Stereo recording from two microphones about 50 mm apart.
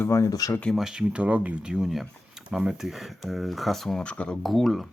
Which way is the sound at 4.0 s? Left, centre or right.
Left.